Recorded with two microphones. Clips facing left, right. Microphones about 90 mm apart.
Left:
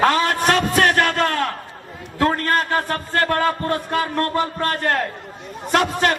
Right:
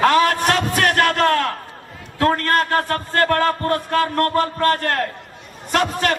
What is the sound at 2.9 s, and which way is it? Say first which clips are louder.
Music: right 2 dB; 15° left (ahead or behind).